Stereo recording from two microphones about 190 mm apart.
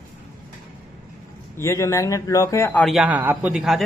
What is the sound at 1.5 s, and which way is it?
Speech, 15° left (ahead or behind).